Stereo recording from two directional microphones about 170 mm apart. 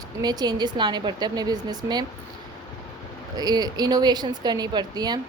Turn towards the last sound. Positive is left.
turn(degrees=-25)  # may be behind; listen again after turning